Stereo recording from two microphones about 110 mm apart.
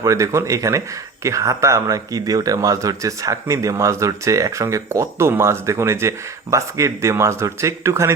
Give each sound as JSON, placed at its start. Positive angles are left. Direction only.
{"t": 0.0, "sound": "speech", "side_deg": -30}